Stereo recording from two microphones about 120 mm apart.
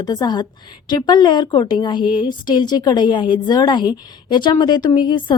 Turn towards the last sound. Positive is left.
turn(degrees=40)  # may be behind; listen again after turning